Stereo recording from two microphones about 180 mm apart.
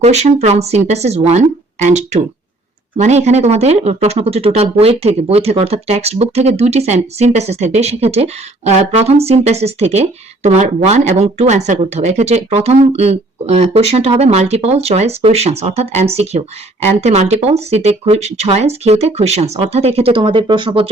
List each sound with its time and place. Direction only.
0.0 s speech: 40° right (ahead or behind)